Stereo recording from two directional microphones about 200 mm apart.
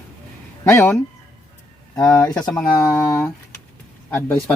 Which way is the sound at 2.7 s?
15° left (ahead or behind).